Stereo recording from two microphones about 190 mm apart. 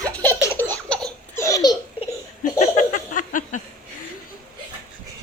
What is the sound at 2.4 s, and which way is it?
Laughter, 40° left (ahead or behind).